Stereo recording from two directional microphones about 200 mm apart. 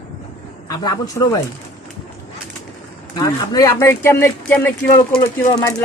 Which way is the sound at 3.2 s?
15° left (ahead or behind).